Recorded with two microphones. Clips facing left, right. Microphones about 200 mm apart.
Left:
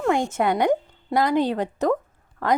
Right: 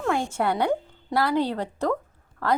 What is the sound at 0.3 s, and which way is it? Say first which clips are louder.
A woman's voice: left 3 dB; 15° left (ahead or behind).